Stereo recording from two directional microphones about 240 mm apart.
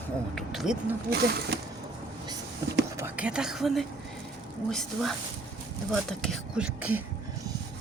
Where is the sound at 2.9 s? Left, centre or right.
Centre.